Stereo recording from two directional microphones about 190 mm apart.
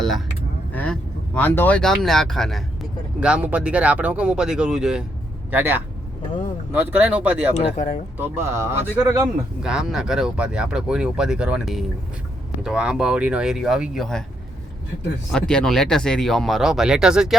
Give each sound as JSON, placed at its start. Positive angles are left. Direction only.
{"t": 0.7, "sound": "speech", "side_deg": 5}
{"t": 7.5, "sound": "speech", "side_deg": 40}
{"t": 8.2, "sound": "speech", "side_deg": -15}
{"t": 9.6, "sound": "speech", "side_deg": 0}
{"t": 15.3, "sound": "speech", "side_deg": 5}